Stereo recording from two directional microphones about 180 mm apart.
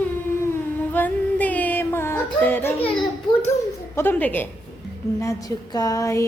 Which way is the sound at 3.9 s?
10° left (ahead or behind).